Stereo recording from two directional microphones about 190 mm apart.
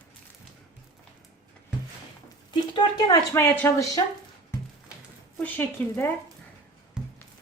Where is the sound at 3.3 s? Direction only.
10° left (ahead or behind).